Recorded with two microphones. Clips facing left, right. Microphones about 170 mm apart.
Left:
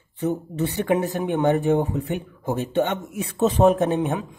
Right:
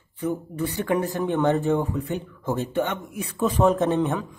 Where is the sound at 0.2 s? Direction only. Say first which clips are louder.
Left 2 dB; 20° left (ahead or behind).